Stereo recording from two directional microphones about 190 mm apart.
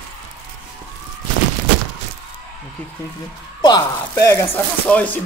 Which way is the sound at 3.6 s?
20° left (ahead or behind).